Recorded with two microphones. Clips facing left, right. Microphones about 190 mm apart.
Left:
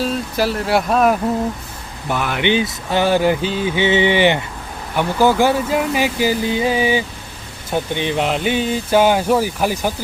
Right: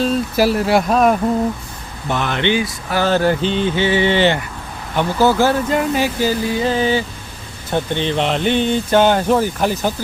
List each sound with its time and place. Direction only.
0.3 s speech: 10° right (ahead or behind); by 2.5 s 5° left (ahead or behind)
2.5 s speech: 25° left (ahead or behind)
3.1 s speech: 15° left (ahead or behind)
3.8 s speech: 20° left (ahead or behind)